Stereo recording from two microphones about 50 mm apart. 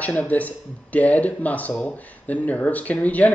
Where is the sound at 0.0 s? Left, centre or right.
Left.